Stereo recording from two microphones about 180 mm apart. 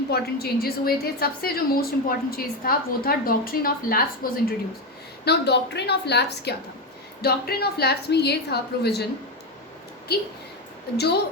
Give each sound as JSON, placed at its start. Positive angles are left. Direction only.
{"t": 0.1, "sound": "a woman's voice", "side_deg": 60}
{"t": 5.2, "sound": "a woman's voice", "side_deg": 65}
{"t": 10.9, "sound": "a woman's voice", "side_deg": 65}